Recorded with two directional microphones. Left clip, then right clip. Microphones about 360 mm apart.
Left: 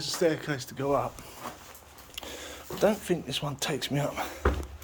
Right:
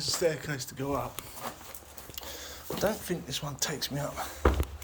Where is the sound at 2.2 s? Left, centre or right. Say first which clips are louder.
Left 3 dB; left.